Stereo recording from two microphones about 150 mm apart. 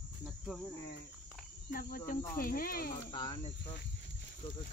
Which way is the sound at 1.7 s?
70° left (ahead or behind).